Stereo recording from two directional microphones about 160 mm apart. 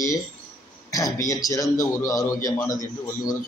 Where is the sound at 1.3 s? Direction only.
20° left (ahead or behind).